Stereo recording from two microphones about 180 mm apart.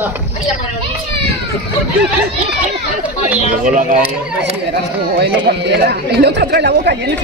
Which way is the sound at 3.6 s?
45° right (ahead or behind).